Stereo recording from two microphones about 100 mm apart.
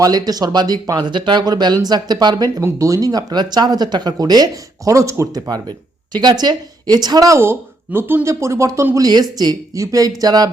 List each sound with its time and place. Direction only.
0.0 s speech: 40° right (ahead or behind)
2.6 s speech: 30° right (ahead or behind)
4.9 s speech: 30° right (ahead or behind)
7.9 s speech: 20° right (ahead or behind)
9.0 s speech: 40° right (ahead or behind)